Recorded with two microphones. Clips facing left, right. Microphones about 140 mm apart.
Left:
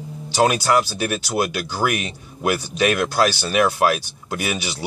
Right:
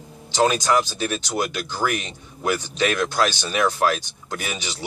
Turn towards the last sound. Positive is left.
turn(degrees=10)  # may be behind; listen again after turning